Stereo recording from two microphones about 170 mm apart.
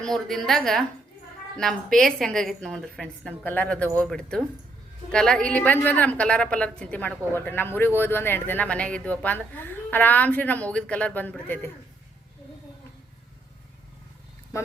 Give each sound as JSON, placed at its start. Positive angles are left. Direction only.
{"t": 0.0, "sound": "a woman's voice", "side_deg": 0}
{"t": 14.5, "sound": "a woman's voice", "side_deg": 15}